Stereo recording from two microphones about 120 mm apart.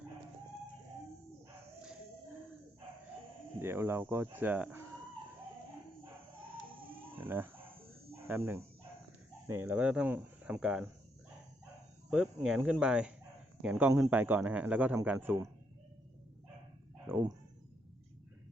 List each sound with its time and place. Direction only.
3.6 s speech: 20° right (ahead or behind)
7.2 s speech: 15° right (ahead or behind)
12.1 s speech: 5° right (ahead or behind)
17.1 s speech: 30° right (ahead or behind)